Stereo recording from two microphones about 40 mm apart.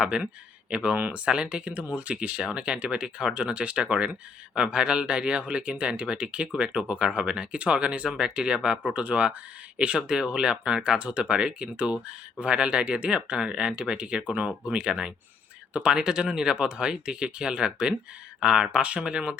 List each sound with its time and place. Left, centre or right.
0.1 s speech: right
1.2 s speech: right